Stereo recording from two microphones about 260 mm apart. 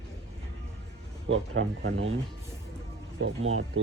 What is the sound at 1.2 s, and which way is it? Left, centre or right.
Speech, right.